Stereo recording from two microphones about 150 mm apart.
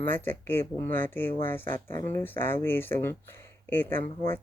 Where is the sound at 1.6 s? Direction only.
65° right (ahead or behind).